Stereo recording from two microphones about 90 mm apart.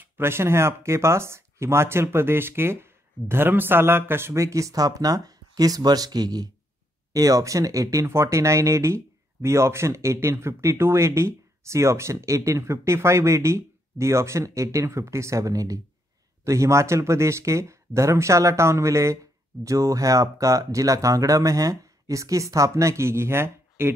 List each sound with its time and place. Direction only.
0.0 s speech: 25° right (ahead or behind)